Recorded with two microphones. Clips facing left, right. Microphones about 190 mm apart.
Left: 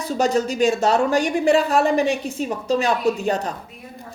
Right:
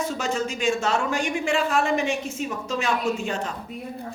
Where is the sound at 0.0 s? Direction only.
35° left (ahead or behind).